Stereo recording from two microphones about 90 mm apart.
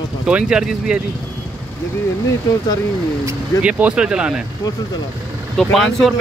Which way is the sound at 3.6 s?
10° right (ahead or behind).